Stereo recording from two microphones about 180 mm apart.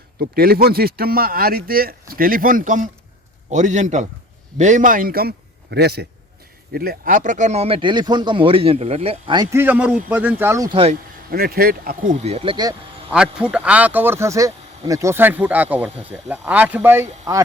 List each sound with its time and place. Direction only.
0.2 s a man's voice: 55° right (ahead or behind)
5.7 s a man's voice: 65° right (ahead or behind)
6.7 s speech: 55° right (ahead or behind); by 10.8 s 15° right (ahead or behind)
11.3 s speech: 55° right (ahead or behind)
12.2 s speech: 35° right (ahead or behind)
13.4 s speech: 5° right (ahead or behind)